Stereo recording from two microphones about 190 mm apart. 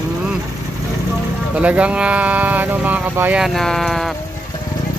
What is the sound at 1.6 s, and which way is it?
Speech, 5° right (ahead or behind).